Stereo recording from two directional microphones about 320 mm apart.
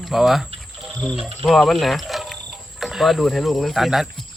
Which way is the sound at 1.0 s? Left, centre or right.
Centre.